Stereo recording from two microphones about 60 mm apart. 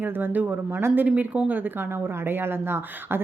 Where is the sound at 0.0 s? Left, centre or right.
Right.